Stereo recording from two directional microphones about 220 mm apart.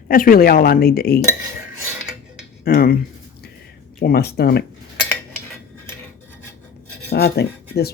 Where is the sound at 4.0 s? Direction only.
45° left (ahead or behind).